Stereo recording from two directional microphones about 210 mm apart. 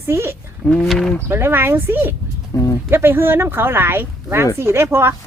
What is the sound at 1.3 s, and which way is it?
Speech, 10° right (ahead or behind).